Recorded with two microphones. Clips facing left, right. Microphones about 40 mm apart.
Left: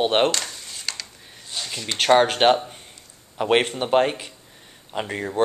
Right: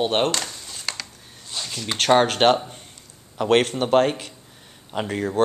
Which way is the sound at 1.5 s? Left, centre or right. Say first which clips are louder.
Even; centre.